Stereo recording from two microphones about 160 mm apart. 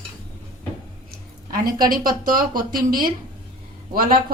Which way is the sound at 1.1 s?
65° right (ahead or behind).